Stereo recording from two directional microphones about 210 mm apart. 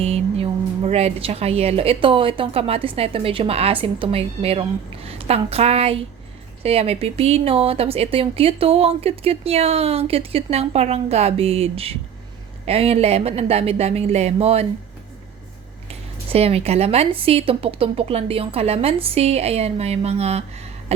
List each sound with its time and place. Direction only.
0.0 s speech: 25° right (ahead or behind)
15.9 s speech: 30° right (ahead or behind)